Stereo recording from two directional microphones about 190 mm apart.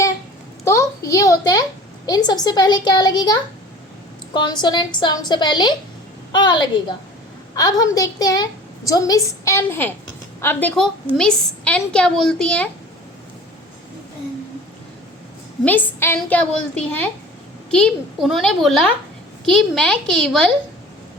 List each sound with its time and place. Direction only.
0.6 s a child's voice: 15° left (ahead or behind)
4.4 s a woman's voice: 25° left (ahead or behind); by 12.6 s 5° left (ahead or behind)
15.6 s a woman's voice: 10° left (ahead or behind)